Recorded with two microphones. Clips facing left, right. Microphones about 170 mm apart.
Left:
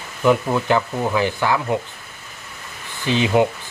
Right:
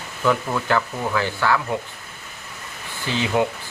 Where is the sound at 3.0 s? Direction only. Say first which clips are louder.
Left 4 dB; 20° left (ahead or behind).